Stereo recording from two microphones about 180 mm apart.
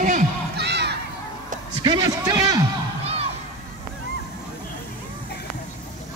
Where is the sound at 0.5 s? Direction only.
70° right (ahead or behind).